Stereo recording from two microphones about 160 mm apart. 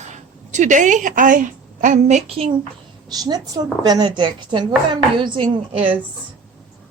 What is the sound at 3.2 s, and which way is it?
A woman's voice, 25° right (ahead or behind).